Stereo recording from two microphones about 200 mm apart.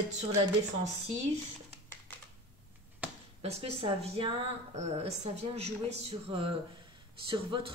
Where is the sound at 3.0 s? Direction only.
10° right (ahead or behind).